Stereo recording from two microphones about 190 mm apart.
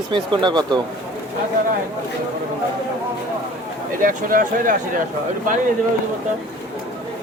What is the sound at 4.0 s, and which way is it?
Speech, 45° right (ahead or behind).